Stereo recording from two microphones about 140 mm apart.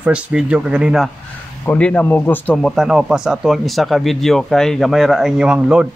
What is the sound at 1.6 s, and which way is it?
Speech, 10° left (ahead or behind).